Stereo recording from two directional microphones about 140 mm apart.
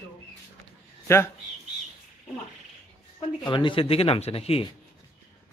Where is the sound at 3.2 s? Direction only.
35° left (ahead or behind).